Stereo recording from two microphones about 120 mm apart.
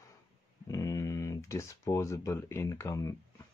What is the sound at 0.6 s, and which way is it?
Speech, 30° left (ahead or behind).